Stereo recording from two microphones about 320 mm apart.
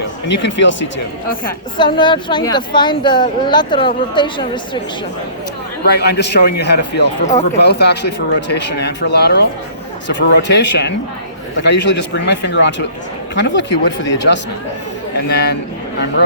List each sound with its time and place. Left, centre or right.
0.3 s speech: left
1.8 s speech: centre
5.8 s speech: left